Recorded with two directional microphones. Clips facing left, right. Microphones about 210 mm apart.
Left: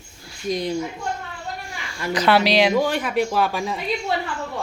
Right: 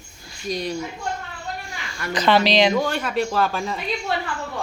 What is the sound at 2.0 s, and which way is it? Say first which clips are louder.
Speech: even; 10° left (ahead or behind).